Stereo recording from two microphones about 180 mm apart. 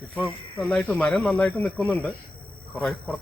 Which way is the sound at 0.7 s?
5° left (ahead or behind).